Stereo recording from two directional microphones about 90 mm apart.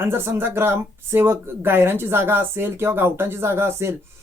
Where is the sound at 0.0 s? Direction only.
25° right (ahead or behind).